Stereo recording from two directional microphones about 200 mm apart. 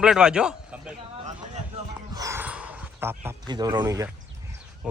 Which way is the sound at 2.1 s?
15° right (ahead or behind).